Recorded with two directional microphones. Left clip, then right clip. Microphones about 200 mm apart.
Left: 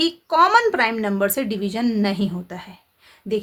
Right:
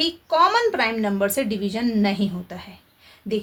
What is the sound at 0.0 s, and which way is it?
A woman's voice, 40° left (ahead or behind).